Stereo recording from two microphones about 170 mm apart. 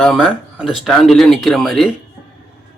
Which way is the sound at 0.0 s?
Centre (ahead or behind).